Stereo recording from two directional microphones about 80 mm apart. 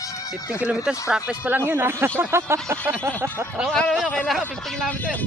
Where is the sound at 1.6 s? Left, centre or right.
Right.